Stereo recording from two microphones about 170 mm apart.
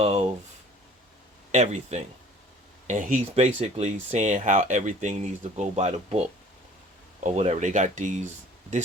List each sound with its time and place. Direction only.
0.0 s speech: 40° right (ahead or behind)
1.5 s speech: 40° right (ahead or behind)